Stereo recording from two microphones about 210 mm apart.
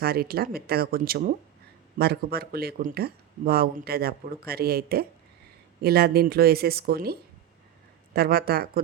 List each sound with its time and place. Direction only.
0.0 s speech: 45° right (ahead or behind)